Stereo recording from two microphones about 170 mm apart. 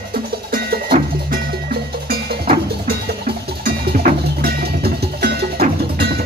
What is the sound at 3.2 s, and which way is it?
Music, 70° right (ahead or behind).